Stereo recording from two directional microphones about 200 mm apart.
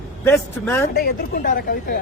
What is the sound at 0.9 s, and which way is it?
Speech, 50° left (ahead or behind).